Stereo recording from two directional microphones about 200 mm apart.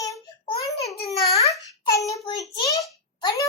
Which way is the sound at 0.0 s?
20° left (ahead or behind).